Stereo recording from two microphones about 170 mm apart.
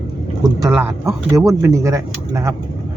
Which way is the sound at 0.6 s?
15° right (ahead or behind).